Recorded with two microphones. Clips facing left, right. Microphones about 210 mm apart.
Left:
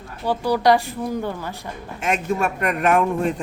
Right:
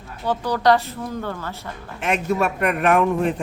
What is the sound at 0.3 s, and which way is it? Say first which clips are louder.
Speech: left 1 dB; 10° left (ahead or behind).